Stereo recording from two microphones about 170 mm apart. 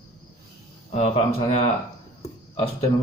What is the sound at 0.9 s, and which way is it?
Speech, 40° left (ahead or behind).